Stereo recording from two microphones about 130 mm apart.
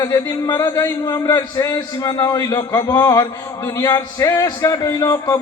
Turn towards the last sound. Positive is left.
turn(degrees=25)  # may be behind; listen again after turning